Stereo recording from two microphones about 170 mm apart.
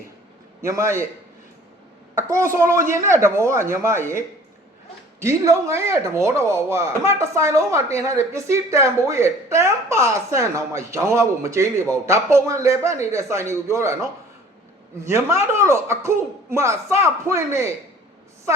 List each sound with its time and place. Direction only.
0.6 s speech: 15° right (ahead or behind)
2.1 s speech: 15° right (ahead or behind)
5.2 s speech: 15° right (ahead or behind)
15.0 s speech: 15° right (ahead or behind)